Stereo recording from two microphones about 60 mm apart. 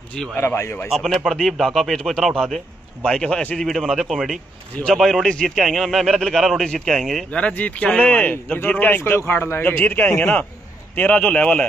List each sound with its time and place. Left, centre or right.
0.2 s a man's voice: centre
3.0 s a man's voice: centre
7.2 s speech: left